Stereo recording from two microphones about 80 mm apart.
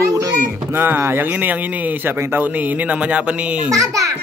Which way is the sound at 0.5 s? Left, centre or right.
Right.